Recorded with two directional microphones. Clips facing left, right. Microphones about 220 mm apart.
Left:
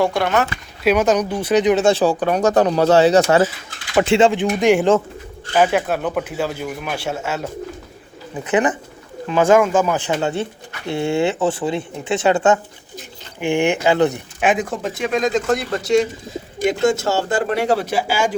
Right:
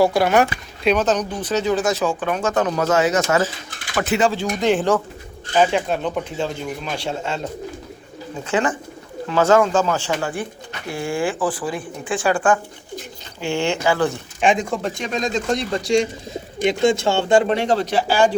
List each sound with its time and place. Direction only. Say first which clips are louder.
0.0 s speech: right 2 dB; 5° right (ahead or behind)
0.9 s speech: left 3 dB; 10° left (ahead or behind)
8.4 s speech: left 3 dB; 20° left (ahead or behind)
14.4 s speech: even; 5° left (ahead or behind)